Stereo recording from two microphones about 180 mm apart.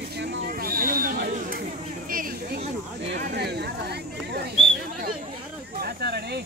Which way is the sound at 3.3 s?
65° right (ahead or behind).